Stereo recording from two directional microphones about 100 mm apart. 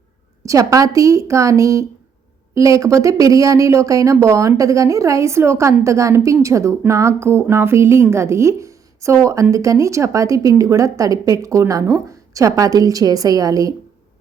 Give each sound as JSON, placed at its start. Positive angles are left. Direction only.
{"t": 0.4, "sound": "a woman's voice", "side_deg": -35}